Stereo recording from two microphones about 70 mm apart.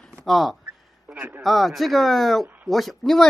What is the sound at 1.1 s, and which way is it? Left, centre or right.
Speech, right.